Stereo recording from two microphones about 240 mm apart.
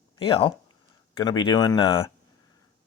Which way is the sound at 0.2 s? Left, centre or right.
Left.